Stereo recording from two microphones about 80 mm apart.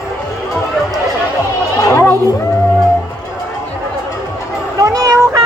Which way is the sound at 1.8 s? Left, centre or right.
Left.